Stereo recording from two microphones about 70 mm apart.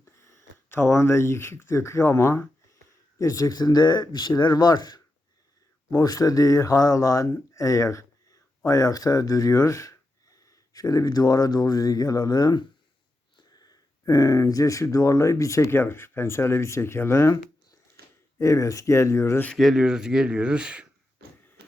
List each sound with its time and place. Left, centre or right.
0.0 s a sound: left
0.8 s speech: left
3.2 s speech: left
3.5 s speech: left
5.9 s speech: left
13.3 s speech: left
15.7 s speech: left
18.3 s speech: left
19.5 s speech: centre